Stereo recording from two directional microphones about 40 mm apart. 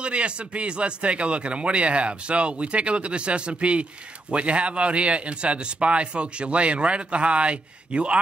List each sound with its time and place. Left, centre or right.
0.0 s speech: right